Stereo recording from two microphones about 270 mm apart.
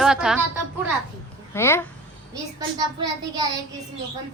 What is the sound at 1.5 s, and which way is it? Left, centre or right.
Speech, centre.